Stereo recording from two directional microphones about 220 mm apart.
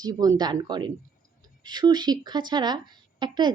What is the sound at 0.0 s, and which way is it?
A woman's voice, 15° right (ahead or behind).